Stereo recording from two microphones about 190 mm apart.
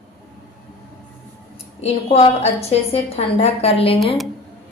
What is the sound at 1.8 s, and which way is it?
A woman's voice, 35° left (ahead or behind).